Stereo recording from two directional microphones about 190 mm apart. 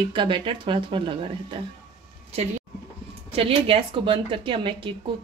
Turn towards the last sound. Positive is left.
turn(degrees=-25)  # may be behind; listen again after turning